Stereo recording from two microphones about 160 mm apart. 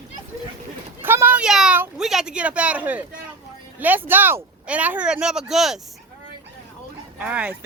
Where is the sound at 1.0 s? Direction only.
15° right (ahead or behind).